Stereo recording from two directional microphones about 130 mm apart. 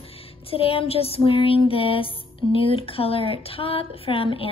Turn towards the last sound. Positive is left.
turn(degrees=45)  # may be behind; listen again after turning